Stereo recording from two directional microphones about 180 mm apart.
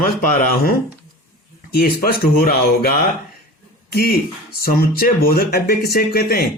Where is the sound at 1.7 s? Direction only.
55° left (ahead or behind).